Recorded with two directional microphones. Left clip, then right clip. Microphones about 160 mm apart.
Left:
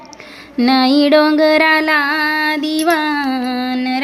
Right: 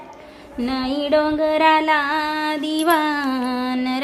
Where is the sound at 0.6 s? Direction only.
40° left (ahead or behind).